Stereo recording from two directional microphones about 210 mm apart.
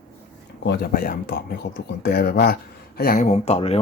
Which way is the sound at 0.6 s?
50° left (ahead or behind).